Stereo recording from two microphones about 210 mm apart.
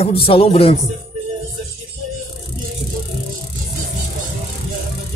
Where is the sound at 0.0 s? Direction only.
25° left (ahead or behind).